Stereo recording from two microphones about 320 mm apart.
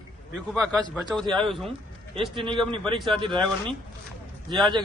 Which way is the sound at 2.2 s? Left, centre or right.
Centre.